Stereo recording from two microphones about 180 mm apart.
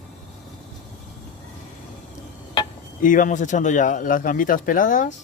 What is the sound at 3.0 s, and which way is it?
A man's voice, 45° left (ahead or behind).